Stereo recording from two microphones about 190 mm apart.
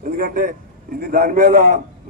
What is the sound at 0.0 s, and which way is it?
A man's voice, 50° right (ahead or behind).